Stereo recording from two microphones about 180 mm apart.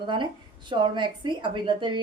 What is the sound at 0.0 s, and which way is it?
A woman's voice, 25° right (ahead or behind).